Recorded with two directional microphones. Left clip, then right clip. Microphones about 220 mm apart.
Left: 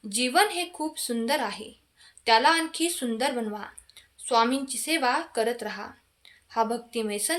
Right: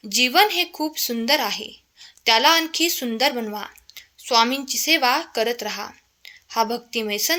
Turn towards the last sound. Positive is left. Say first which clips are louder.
# right 6 dB
turn(degrees=-25)  # may be behind; listen again after turning